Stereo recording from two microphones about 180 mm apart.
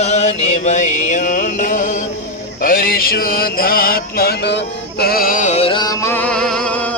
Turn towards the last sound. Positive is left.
turn(degrees=5)  # may be behind; listen again after turning